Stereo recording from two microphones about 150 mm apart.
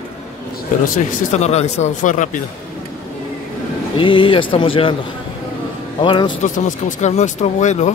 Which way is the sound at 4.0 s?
35° left (ahead or behind).